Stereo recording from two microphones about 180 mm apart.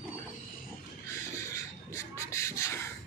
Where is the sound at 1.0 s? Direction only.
15° left (ahead or behind).